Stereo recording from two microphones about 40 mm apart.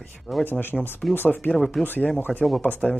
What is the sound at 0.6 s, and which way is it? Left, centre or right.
Speech, left.